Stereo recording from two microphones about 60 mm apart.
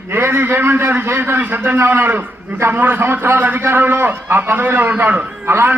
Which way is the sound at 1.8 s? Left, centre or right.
Right.